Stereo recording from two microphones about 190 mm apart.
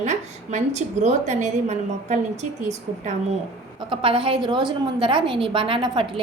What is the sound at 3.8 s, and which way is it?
A woman's voice, 30° right (ahead or behind).